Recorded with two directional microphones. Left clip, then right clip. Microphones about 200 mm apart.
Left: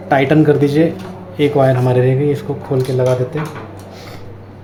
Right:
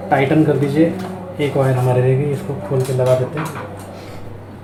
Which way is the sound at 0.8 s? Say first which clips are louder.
Left 1 dB; 60° left (ahead or behind).